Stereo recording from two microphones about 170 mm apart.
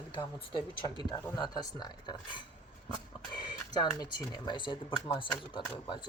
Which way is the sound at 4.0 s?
25° left (ahead or behind).